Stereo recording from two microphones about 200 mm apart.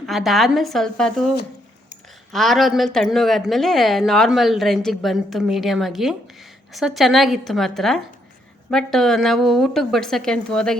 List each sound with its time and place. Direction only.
0.0 s a woman's voice: centre (ahead or behind)
2.3 s a woman's voice: centre (ahead or behind)